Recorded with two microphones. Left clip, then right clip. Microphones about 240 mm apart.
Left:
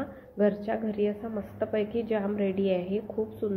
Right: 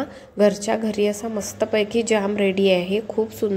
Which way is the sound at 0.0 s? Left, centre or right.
Right.